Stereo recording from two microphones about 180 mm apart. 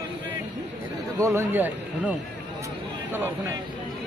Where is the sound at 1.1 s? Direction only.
15° right (ahead or behind).